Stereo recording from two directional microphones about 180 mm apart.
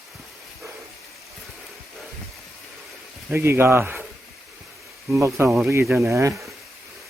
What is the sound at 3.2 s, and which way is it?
Speech, 15° right (ahead or behind).